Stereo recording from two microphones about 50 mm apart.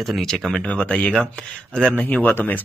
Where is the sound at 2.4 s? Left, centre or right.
Left.